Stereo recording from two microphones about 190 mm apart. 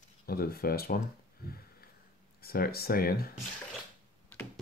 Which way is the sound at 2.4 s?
55° left (ahead or behind).